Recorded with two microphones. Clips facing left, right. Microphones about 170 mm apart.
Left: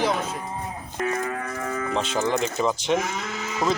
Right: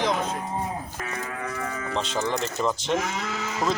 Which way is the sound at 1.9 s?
5° left (ahead or behind).